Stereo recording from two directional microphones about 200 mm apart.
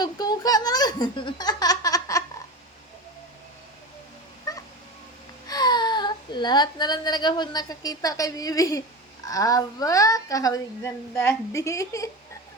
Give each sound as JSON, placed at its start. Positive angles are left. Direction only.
{"t": 0.0, "sound": "baby laughter", "side_deg": 20}
{"t": 4.5, "sound": "cat", "side_deg": 15}
{"t": 5.5, "sound": "a woman's voice", "side_deg": 20}